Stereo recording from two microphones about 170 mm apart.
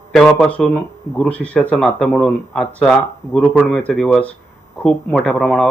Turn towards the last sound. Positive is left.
turn(degrees=5)  # may be behind; listen again after turning